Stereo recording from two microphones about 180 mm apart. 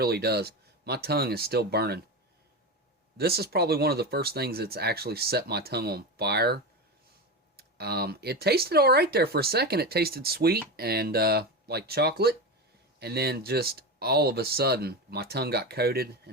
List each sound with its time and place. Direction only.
0.0 s speech: 60° right (ahead or behind)
3.2 s speech: 60° right (ahead or behind)